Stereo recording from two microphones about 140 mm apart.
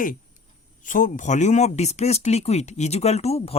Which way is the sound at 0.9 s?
70° left (ahead or behind).